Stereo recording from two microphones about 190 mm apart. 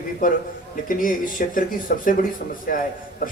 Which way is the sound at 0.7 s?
45° left (ahead or behind).